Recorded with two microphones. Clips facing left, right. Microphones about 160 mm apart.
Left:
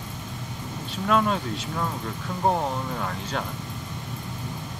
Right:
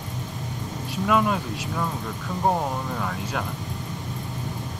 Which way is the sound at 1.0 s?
5° right (ahead or behind).